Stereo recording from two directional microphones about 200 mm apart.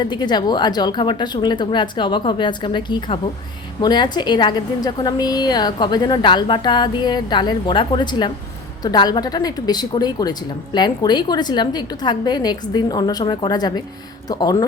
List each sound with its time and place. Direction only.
0.0 s a woman's voice: 20° left (ahead or behind)